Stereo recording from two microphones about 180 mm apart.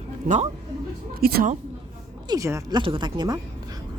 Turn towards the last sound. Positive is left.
turn(degrees=-25)  # may be behind; listen again after turning